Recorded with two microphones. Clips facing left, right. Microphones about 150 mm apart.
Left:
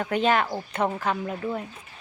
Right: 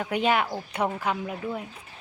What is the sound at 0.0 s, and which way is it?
Speech, 10° right (ahead or behind).